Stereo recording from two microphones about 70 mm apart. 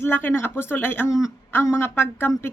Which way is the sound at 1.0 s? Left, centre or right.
Left.